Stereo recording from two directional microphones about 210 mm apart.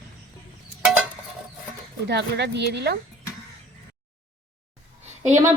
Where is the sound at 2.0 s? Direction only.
55° right (ahead or behind).